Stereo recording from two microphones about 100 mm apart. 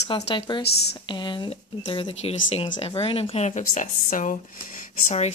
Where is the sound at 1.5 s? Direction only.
60° left (ahead or behind); by 2.9 s 85° left.